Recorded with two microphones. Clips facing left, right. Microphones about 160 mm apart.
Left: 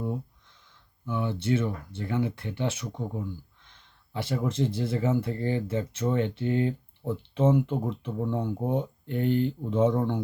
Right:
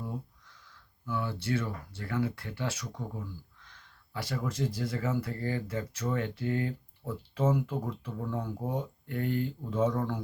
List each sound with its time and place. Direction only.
0.0 s speech: 20° left (ahead or behind)